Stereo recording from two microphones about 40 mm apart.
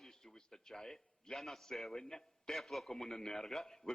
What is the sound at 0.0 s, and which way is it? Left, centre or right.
A man's voice, centre.